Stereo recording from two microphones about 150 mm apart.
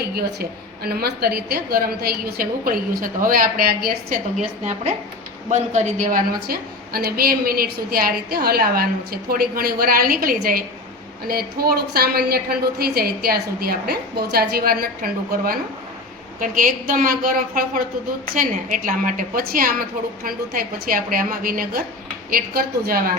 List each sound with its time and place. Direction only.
0.0 s a woman's voice: 90° right
4.4 s a woman's voice: 50° right (ahead or behind); by 10.6 s 75° right (ahead or behind)
11.3 s a woman's voice: 90° right
16.4 s a woman's voice: 65° right (ahead or behind)